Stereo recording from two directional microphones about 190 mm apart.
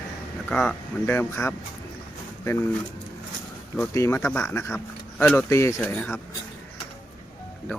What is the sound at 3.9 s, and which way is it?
Speech, 15° left (ahead or behind).